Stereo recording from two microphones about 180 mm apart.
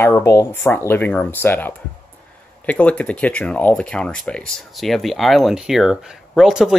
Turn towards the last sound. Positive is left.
turn(degrees=0)  # may be behind; listen again after turning